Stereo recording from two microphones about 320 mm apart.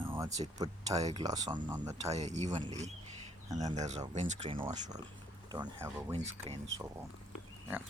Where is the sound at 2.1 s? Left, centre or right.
Right.